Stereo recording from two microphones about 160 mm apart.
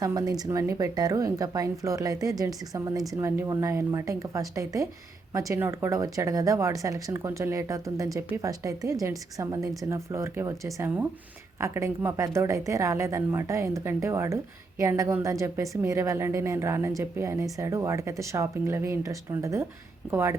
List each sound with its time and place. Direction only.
0.0 s a woman's voice: 25° right (ahead or behind)